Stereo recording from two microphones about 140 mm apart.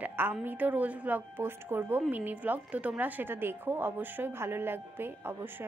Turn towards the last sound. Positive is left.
turn(degrees=-15)  # may be behind; listen again after turning